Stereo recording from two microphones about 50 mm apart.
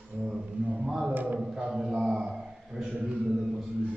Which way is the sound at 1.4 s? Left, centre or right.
Centre.